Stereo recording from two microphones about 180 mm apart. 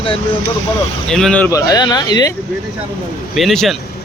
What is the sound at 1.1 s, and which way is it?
Speech, 5° left (ahead or behind).